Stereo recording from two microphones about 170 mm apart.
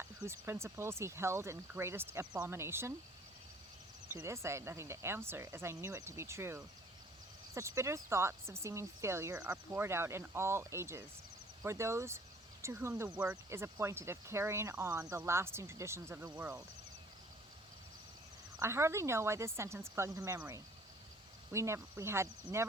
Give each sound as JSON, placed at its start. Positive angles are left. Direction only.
{"t": 0.3, "sound": "speech", "side_deg": -15}
{"t": 4.1, "sound": "speech", "side_deg": -15}
{"t": 13.1, "sound": "speech", "side_deg": -5}
{"t": 13.5, "sound": "speech", "side_deg": -15}
{"t": 18.6, "sound": "speech", "side_deg": -15}
{"t": 21.5, "sound": "speech", "side_deg": -15}